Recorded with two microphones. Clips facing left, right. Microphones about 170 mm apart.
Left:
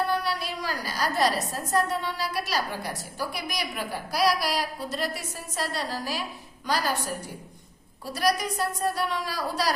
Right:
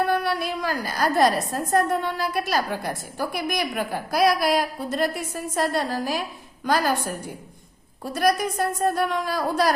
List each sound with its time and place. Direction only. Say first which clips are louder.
0.1 s a woman's voice: right 5 dB; 55° right (ahead or behind)
8.0 s a woman's voice: right 4 dB; 50° right (ahead or behind)